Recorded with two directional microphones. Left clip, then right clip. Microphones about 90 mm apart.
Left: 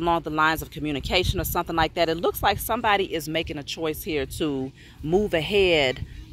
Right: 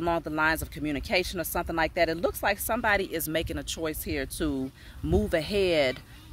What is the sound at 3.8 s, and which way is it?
Speech, 40° right (ahead or behind).